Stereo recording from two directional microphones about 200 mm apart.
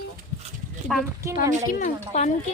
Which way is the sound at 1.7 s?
40° left (ahead or behind).